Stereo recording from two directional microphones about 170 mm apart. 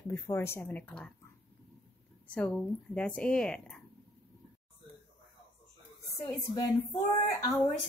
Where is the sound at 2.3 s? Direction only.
5° left (ahead or behind).